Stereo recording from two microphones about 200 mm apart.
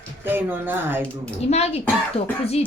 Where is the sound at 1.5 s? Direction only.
30° left (ahead or behind).